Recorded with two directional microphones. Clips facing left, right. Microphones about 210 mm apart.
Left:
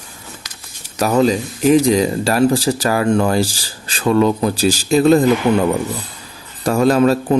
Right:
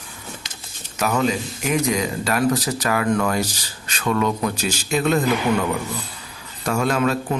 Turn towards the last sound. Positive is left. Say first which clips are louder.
# left 7 dB
turn(degrees=35)  # may be behind; listen again after turning